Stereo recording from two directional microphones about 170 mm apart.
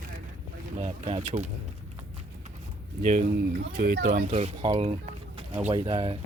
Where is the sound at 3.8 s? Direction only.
65° right (ahead or behind).